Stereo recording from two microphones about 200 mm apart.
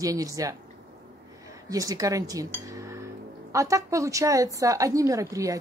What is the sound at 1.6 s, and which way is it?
A woman's voice, 15° right (ahead or behind).